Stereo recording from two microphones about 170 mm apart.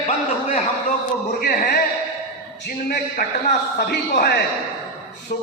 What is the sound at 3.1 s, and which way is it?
Speech, 45° left (ahead or behind).